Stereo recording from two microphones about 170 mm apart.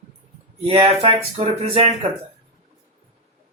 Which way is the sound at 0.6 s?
30° right (ahead or behind).